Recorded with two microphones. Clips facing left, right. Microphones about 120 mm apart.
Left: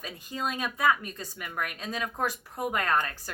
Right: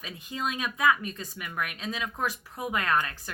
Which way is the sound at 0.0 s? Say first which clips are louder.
Even; 40° left (ahead or behind).